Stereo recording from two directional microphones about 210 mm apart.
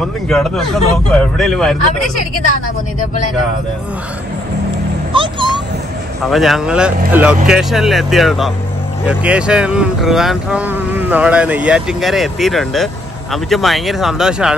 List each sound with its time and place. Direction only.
0.3 s speech: centre (ahead or behind)
5.1 s a sound: 25° right (ahead or behind)
6.3 s speech: centre (ahead or behind)